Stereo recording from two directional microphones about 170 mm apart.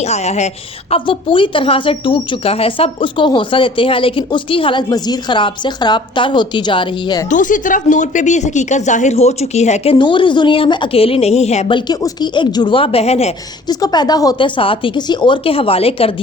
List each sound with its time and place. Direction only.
0.0 s a woman's voice: 40° left (ahead or behind)
7.3 s speech: 50° left (ahead or behind)
11.9 s a woman's voice: 25° left (ahead or behind)
13.7 s a woman's voice: 25° left (ahead or behind)